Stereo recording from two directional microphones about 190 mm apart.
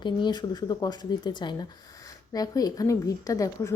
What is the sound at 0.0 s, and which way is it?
A woman's voice, 25° left (ahead or behind).